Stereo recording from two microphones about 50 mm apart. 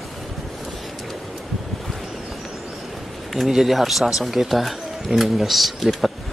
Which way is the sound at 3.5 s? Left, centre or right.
Centre.